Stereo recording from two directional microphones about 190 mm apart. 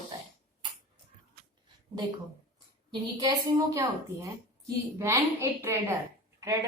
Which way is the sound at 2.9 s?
20° right (ahead or behind).